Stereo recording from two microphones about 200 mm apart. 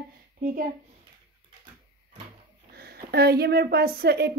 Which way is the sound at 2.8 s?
50° right (ahead or behind).